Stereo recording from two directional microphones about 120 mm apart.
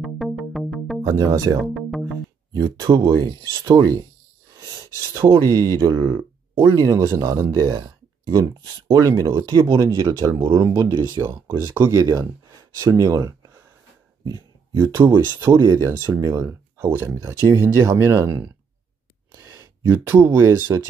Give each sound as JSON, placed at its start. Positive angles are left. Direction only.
{"t": 0.0, "sound": "music", "side_deg": 0}
{"t": 1.0, "sound": "speech", "side_deg": -30}
{"t": 1.6, "sound": "music", "side_deg": 0}
{"t": 2.5, "sound": "speech", "side_deg": -35}
{"t": 4.6, "sound": "sneeze", "side_deg": -30}
{"t": 5.4, "sound": "speech", "side_deg": -30}
{"t": 9.0, "sound": "speech", "side_deg": -25}